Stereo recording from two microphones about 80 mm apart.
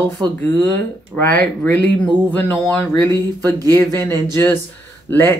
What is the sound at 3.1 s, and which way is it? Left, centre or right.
Speech, right.